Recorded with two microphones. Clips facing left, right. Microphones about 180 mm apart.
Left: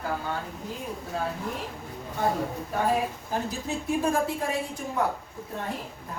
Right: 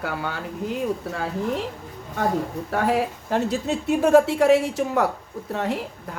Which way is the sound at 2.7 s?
75° right (ahead or behind).